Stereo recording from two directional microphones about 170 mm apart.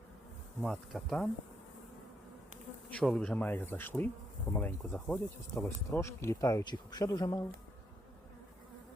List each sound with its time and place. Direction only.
0.6 s speech: centre (ahead or behind)
2.9 s speech: 5° left (ahead or behind)